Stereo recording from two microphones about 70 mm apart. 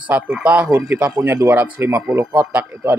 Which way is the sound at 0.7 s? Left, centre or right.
Right.